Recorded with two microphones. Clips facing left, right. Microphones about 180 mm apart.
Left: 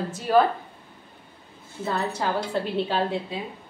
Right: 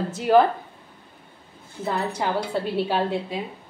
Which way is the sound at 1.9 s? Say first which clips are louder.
Right 1 dB; 15° right (ahead or behind).